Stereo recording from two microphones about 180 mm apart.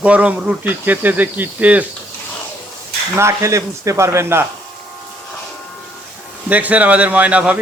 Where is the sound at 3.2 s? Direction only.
15° right (ahead or behind).